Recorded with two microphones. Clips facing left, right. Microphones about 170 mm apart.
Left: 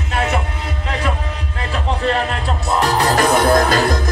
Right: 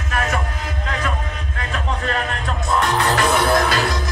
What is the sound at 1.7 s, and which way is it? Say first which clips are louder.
Music: left 5 dB; 30° left (ahead or behind).